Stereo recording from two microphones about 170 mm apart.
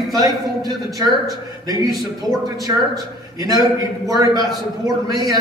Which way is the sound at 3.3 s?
20° right (ahead or behind).